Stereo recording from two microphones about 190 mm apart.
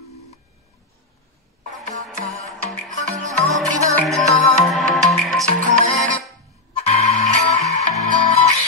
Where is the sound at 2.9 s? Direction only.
40° right (ahead or behind).